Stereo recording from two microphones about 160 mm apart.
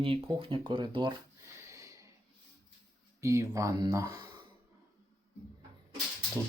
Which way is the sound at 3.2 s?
20° right (ahead or behind).